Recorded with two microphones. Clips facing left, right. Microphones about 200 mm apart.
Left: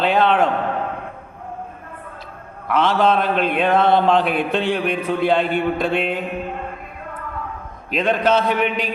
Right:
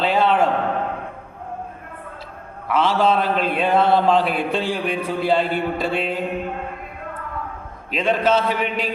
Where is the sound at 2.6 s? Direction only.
5° right (ahead or behind).